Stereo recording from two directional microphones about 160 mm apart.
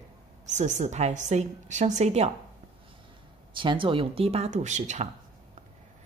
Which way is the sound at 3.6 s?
30° right (ahead or behind).